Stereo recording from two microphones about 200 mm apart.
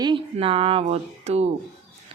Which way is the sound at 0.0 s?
25° right (ahead or behind).